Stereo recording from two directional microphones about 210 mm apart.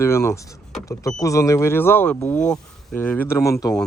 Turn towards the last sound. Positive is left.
turn(degrees=15)  # may be behind; listen again after turning